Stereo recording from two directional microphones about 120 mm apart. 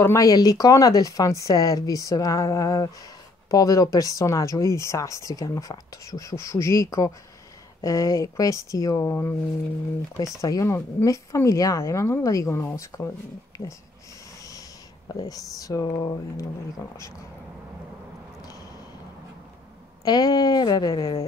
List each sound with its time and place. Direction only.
0.0 s speech: 25° left (ahead or behind)
10.4 s speech: 25° left (ahead or behind)
15.2 s speech: 30° left (ahead or behind)
20.1 s a woman's voice: 30° left (ahead or behind)